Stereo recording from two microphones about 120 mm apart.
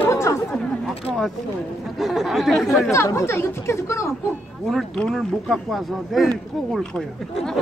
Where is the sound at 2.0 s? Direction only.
Centre (ahead or behind).